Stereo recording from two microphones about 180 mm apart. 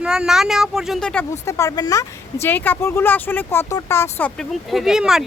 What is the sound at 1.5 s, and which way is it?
Speech, 15° left (ahead or behind).